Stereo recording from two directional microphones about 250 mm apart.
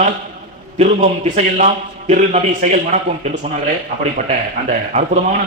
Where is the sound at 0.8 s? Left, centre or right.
Right.